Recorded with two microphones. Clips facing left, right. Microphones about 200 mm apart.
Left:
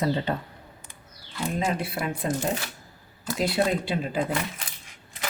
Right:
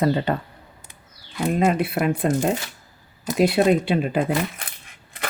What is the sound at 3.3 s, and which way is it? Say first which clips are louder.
Speech: right 7 dB; 60° right (ahead or behind).